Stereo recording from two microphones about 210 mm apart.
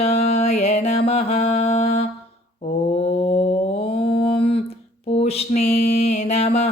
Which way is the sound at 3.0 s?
30° left (ahead or behind).